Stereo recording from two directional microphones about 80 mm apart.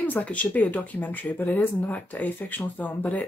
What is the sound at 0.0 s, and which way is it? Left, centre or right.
Speech, centre.